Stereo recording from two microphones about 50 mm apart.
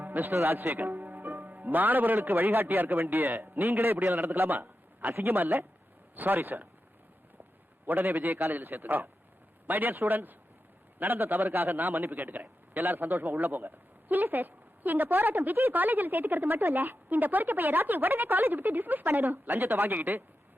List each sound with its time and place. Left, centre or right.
0.0 s music: right
0.4 s a man's voice: right
7.9 s a man's voice: right
12.1 s a man's voice: right